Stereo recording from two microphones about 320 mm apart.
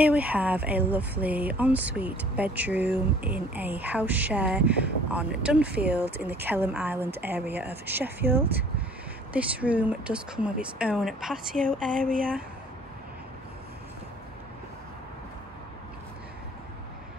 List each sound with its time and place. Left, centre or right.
0.0 s speech: centre
12.0 s speech: right